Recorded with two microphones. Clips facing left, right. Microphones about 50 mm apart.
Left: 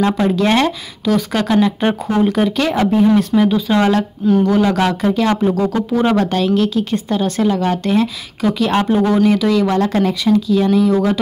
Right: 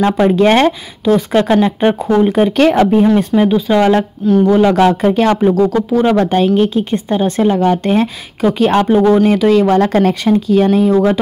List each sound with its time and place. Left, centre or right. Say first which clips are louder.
0.0 s speech: right 4 dB; right
1.8 s speech: right 4 dB; centre
2.5 s speech: right 5 dB; right
3.2 s speech: right 2 dB; right
4.2 s speech: right 1 dB; centre
4.7 s speech: right 5 dB; right
5.5 s speech: right 4 dB; centre
6.3 s speech: right 4 dB; right